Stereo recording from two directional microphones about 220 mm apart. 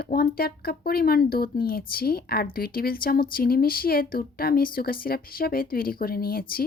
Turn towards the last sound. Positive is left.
turn(degrees=45)  # may be behind; listen again after turning